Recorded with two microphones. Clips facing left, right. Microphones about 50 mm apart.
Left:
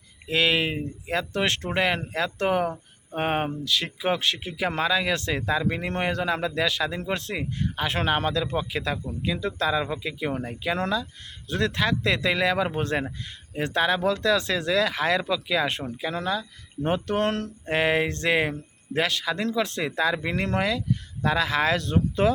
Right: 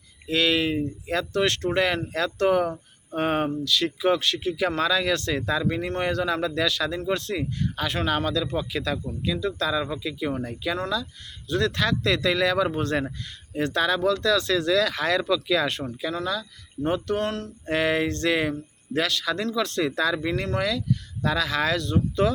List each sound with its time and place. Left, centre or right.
0.3 s speech: left
17.7 s speech: left